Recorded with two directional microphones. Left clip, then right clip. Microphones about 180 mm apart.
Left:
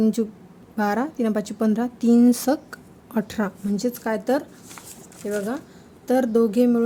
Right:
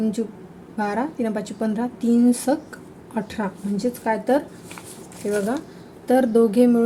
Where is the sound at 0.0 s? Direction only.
45° left (ahead or behind).